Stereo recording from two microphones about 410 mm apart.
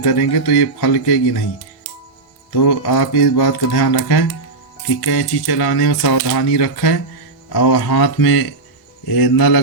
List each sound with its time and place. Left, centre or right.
0.0 s speech: left
2.5 s speech: left